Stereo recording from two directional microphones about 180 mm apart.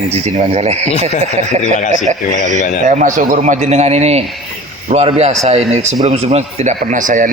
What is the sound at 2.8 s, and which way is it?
A man's voice, 45° right (ahead or behind).